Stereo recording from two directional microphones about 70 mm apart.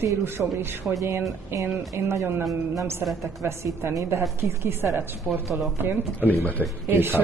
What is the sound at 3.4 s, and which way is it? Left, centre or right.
A woman's voice, right.